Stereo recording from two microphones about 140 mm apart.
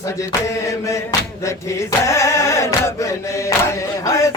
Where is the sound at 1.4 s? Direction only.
20° left (ahead or behind).